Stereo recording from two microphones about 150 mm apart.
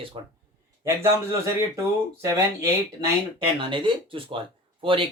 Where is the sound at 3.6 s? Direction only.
35° right (ahead or behind).